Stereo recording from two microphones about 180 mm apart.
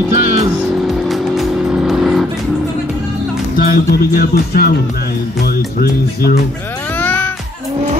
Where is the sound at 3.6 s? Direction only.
55° left (ahead or behind).